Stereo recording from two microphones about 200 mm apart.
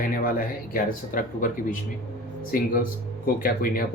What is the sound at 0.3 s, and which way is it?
Speech, 45° left (ahead or behind).